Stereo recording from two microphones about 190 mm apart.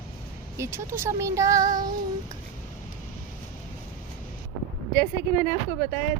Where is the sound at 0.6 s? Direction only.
15° right (ahead or behind).